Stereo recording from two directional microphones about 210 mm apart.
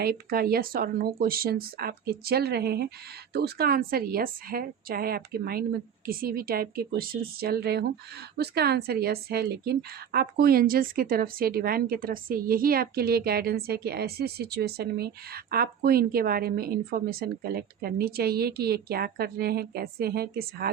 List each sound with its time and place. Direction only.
0.0 s speech: 45° right (ahead or behind)